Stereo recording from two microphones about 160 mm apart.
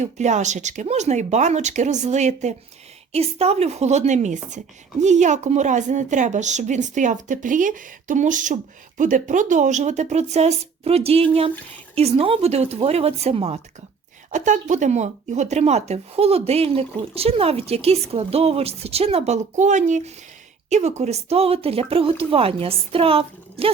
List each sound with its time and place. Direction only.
0.0 s speech: 45° right (ahead or behind)